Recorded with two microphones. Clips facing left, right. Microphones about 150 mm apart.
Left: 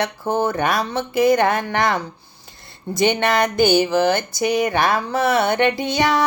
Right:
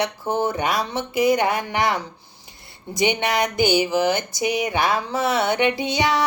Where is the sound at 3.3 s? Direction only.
15° right (ahead or behind).